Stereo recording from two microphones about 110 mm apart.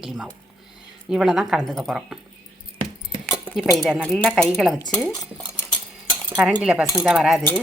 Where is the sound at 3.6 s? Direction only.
Centre (ahead or behind).